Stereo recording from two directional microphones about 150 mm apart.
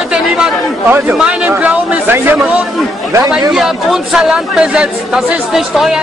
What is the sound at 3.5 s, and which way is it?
Speech, 5° right (ahead or behind).